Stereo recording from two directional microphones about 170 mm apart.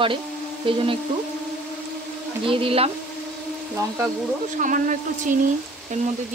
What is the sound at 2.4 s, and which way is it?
Speech, 35° right (ahead or behind).